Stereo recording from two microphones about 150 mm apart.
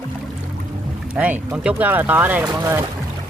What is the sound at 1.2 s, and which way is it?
Speech, 10° right (ahead or behind).